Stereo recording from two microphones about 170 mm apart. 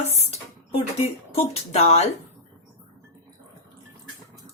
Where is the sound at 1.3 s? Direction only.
35° left (ahead or behind).